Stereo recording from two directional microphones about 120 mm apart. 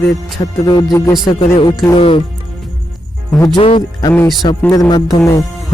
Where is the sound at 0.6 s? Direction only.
35° left (ahead or behind).